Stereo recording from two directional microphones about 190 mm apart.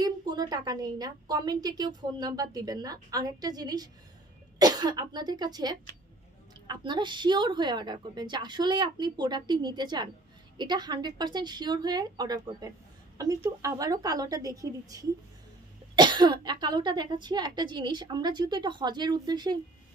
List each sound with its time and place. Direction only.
0.0 s a woman's voice: 20° right (ahead or behind)